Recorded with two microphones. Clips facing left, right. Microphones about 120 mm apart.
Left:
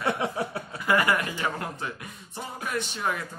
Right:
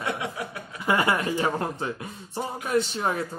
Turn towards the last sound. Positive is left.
turn(degrees=-30)  # may be behind; listen again after turning